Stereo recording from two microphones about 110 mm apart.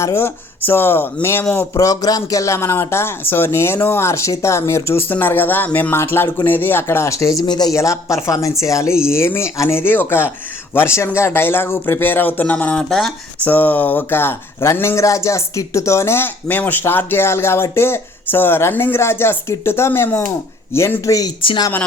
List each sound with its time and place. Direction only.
0.0 s speech: 25° left (ahead or behind)
1.7 s speech: 30° left (ahead or behind)
7.8 s speech: 25° left (ahead or behind)